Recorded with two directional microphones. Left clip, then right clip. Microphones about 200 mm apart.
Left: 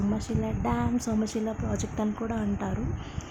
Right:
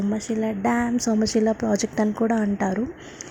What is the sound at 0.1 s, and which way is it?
A woman's voice, 20° right (ahead or behind).